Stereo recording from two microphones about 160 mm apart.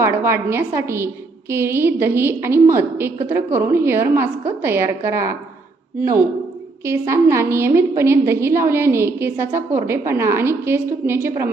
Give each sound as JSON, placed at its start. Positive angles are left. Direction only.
{"t": 0.0, "sound": "a woman's voice", "side_deg": -15}
{"t": 6.8, "sound": "a woman's voice", "side_deg": -15}